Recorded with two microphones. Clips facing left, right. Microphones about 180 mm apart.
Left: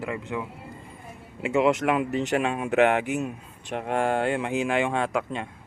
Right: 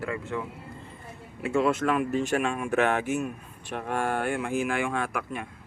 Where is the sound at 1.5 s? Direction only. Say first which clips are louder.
Left 2 dB; 20° left (ahead or behind).